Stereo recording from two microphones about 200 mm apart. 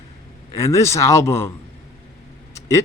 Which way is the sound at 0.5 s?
15° left (ahead or behind).